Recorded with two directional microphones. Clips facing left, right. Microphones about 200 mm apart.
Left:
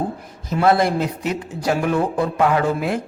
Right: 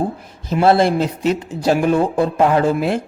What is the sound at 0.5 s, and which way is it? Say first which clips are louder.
Speech: right 3 dB; 30° right (ahead or behind).